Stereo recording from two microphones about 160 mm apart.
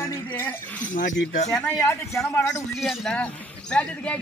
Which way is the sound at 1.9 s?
20° left (ahead or behind).